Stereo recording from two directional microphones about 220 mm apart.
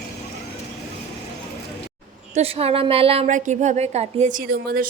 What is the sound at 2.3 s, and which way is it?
A woman's voice, 25° right (ahead or behind).